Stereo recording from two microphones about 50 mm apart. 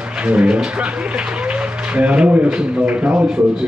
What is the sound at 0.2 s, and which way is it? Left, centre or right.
A man's voice, right.